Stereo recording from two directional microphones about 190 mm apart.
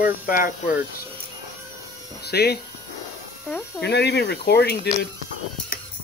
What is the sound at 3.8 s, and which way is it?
Speech, 60° left (ahead or behind).